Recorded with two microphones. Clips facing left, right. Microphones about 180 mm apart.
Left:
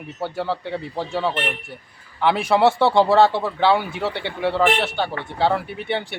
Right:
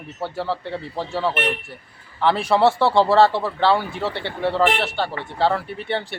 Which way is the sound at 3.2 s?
15° left (ahead or behind).